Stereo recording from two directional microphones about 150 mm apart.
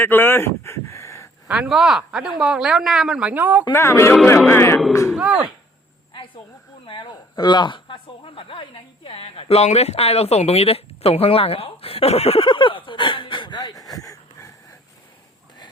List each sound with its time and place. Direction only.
0.0 s speech: 15° left (ahead or behind)
1.5 s speech: 5° right (ahead or behind)
3.7 s speech: 20° left (ahead or behind)
5.1 s speech: 5° right (ahead or behind)
6.8 s speech: 35° left (ahead or behind)